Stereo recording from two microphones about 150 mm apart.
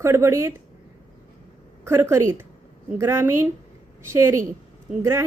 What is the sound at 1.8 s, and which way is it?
A woman's voice, 15° right (ahead or behind).